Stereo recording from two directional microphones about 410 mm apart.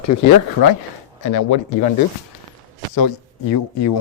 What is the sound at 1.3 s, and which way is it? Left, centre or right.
Speech, left.